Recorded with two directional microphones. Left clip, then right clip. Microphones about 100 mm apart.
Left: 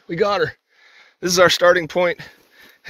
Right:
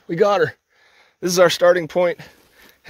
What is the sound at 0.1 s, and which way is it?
Speech, 90° right.